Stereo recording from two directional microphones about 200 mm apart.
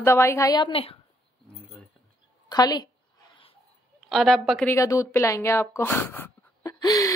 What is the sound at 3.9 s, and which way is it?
Speech, centre (ahead or behind).